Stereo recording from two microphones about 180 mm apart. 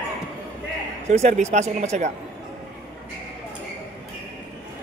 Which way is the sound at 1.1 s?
40° right (ahead or behind).